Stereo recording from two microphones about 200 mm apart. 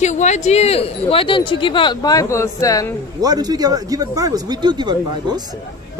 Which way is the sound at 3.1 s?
20° right (ahead or behind).